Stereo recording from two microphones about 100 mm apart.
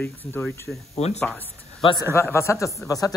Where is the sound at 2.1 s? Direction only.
25° left (ahead or behind).